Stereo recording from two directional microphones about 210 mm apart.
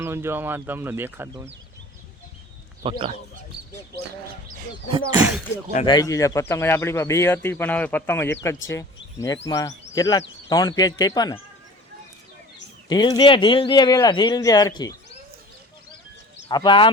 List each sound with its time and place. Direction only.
0.0 s speech: 10° right (ahead or behind)
2.8 s speech: 25° right (ahead or behind)
4.9 s speech: 25° right (ahead or behind)
5.8 s speech: 20° left (ahead or behind)
12.9 s a man's voice: 20° left (ahead or behind)
16.5 s a man's voice: 20° left (ahead or behind)